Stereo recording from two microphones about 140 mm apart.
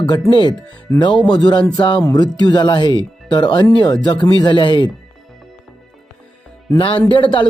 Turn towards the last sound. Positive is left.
turn(degrees=35)  # may be behind; listen again after turning